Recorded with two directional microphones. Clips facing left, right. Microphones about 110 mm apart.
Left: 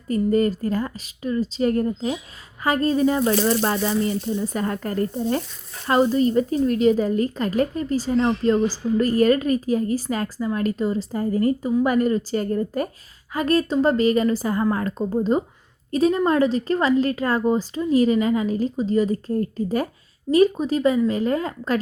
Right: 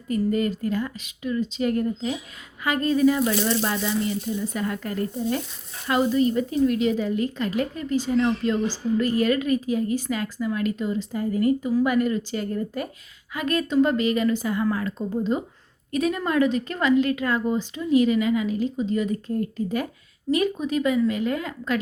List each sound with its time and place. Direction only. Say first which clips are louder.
0.1 s speech: left 4 dB; 40° left (ahead or behind)
15.9 s speech: left 5 dB; 30° left (ahead or behind)